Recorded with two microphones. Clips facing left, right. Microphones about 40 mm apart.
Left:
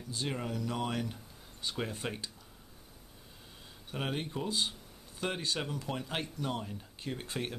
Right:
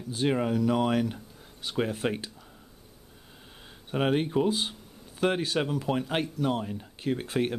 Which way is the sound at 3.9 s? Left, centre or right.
Right.